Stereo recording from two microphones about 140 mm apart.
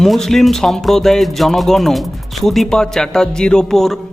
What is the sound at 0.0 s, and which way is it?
Speech, centre (ahead or behind).